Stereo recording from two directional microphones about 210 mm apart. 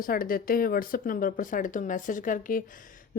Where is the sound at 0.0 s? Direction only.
40° left (ahead or behind).